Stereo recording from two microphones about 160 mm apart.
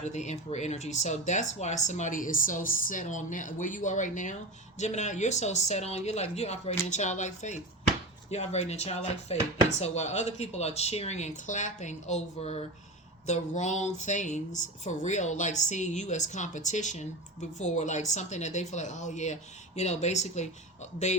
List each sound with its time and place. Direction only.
0.0 s speech: 45° left (ahead or behind)